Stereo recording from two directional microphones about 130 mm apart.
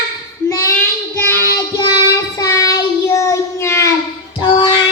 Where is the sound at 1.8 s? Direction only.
30° left (ahead or behind).